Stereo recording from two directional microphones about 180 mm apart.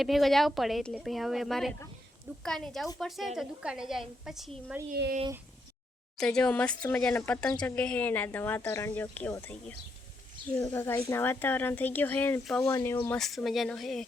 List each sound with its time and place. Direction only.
0.0 s a woman's voice: centre (ahead or behind)
6.1 s a woman's voice: 5° left (ahead or behind)
13.1 s a woman's voice: centre (ahead or behind)